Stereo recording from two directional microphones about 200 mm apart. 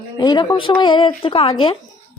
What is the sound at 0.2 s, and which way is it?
Speech, 20° left (ahead or behind).